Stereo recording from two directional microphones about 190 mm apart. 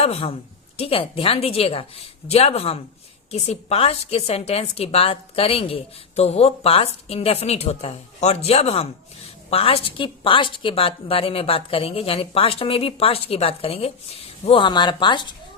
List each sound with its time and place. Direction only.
0.0 s a woman's voice: 30° left (ahead or behind)